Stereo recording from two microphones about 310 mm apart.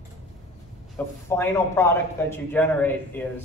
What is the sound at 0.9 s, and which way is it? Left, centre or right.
A man's voice, centre.